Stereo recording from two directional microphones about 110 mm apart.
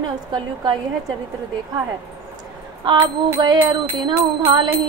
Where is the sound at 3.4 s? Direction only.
40° right (ahead or behind).